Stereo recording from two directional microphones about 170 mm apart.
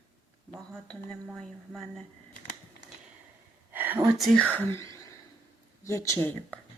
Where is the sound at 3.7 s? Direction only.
10° right (ahead or behind).